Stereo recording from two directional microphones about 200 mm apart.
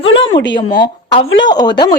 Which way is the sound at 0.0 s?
25° left (ahead or behind).